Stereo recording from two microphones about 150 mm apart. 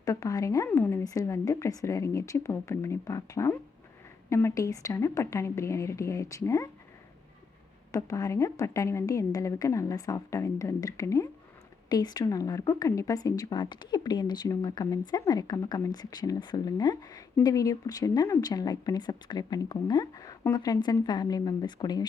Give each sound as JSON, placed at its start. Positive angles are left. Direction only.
{"t": 0.0, "sound": "a woman's voice", "side_deg": 20}
{"t": 7.9, "sound": "a woman's voice", "side_deg": 20}